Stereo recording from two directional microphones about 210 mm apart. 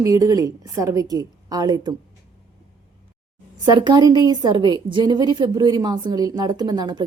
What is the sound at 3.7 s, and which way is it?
A woman's voice, 20° right (ahead or behind).